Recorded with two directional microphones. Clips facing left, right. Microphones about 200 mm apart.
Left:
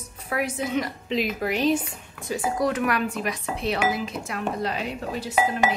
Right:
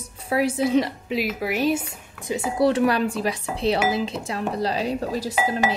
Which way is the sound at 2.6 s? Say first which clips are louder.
Right 7 dB; 30° right (ahead or behind).